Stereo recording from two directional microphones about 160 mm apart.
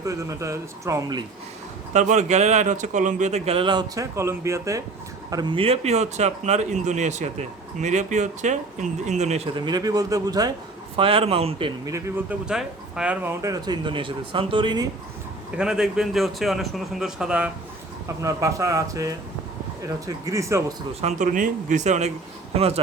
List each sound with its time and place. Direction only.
0.0 s speech: 20° right (ahead or behind)
1.9 s speech: 50° right (ahead or behind)
9.6 s speech: 25° right (ahead or behind)
10.9 s speech: 35° right (ahead or behind)
11.9 s speech: 20° right (ahead or behind)
13.4 s speech: 25° right (ahead or behind)
15.5 s a man's voice: 5° right (ahead or behind)
18.2 s speech: 20° right (ahead or behind)
21.0 s speech: 50° right (ahead or behind)